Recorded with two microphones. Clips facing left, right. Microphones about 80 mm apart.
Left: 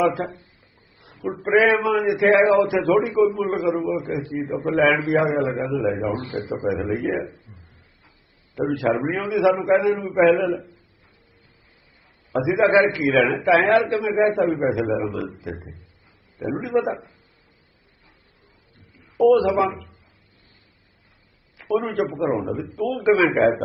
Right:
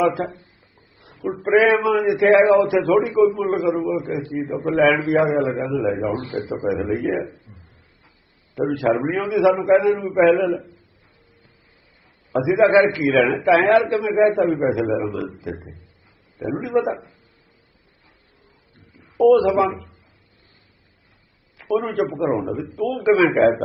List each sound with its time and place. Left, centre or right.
0.0 s a man's voice: centre
1.3 s a man's voice: centre
7.3 s a sound: right
8.5 s a man's voice: centre
12.3 s a man's voice: centre
16.4 s a man's voice: centre
19.2 s a man's voice: centre
19.7 s a sound: right
21.7 s a man's voice: centre